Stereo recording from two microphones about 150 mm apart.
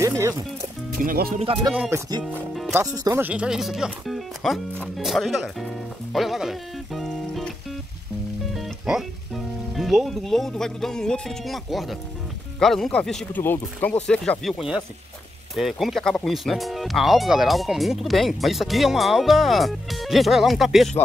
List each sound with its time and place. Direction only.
0.0 s speech: 20° right (ahead or behind)
0.9 s speech: 80° right
1.7 s speech: 10° right (ahead or behind)
2.7 s speech: 20° right (ahead or behind); by 5.7 s centre (ahead or behind)
6.1 s music: centre (ahead or behind)
8.5 s speech: centre (ahead or behind)